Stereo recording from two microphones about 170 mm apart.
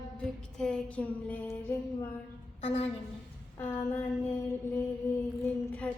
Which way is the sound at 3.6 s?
15° left (ahead or behind).